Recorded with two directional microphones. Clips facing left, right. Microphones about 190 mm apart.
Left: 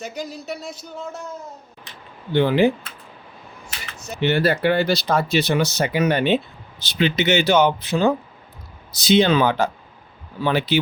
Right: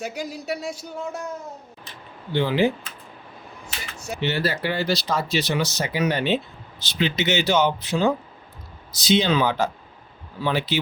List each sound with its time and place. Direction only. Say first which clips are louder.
0.0 s speech: even; 10° right (ahead or behind)
2.3 s speech: left 4 dB; 55° left (ahead or behind)
3.9 s a sound: right 2 dB; 10° right (ahead or behind)
4.2 s speech: left 6 dB; 55° left (ahead or behind)